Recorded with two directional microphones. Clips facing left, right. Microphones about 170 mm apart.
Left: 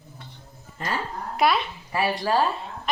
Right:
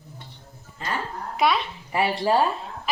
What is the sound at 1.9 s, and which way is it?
Speech, 25° right (ahead or behind).